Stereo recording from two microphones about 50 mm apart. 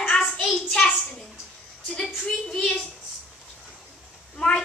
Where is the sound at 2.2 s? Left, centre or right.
Centre.